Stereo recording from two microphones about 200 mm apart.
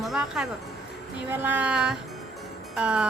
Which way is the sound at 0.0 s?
Centre (ahead or behind).